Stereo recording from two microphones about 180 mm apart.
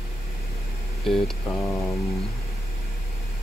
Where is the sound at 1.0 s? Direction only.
Centre (ahead or behind).